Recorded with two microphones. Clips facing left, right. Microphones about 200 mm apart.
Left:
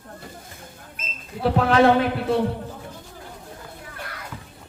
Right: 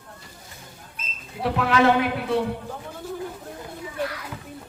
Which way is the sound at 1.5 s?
35° left (ahead or behind).